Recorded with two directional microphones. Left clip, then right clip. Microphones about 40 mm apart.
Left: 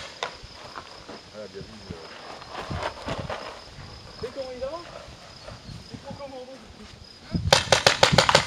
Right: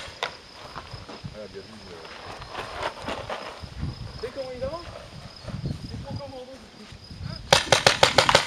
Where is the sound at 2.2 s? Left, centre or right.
Right.